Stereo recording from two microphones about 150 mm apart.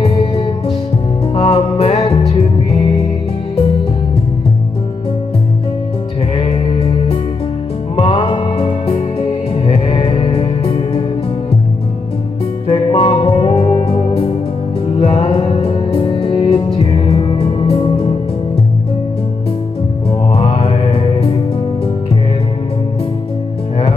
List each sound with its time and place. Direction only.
0.0 s music: 40° left (ahead or behind)
6.3 s music: 40° left (ahead or behind)
12.6 s music: 35° left (ahead or behind)
20.3 s music: 35° left (ahead or behind)